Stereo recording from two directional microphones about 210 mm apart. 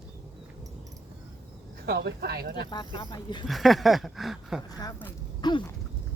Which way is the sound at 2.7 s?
20° left (ahead or behind).